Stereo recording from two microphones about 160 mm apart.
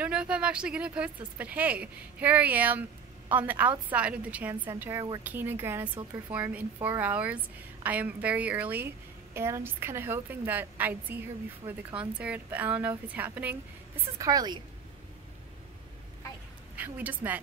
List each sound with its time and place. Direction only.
0.0 s a woman's voice: 5° right (ahead or behind)
14.1 s a woman's voice: 20° right (ahead or behind)
16.7 s a woman's voice: 10° right (ahead or behind)